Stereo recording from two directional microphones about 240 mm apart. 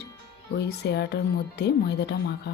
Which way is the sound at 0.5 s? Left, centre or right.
Left.